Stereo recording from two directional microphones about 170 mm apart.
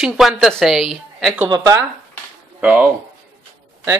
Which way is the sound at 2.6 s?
10° right (ahead or behind).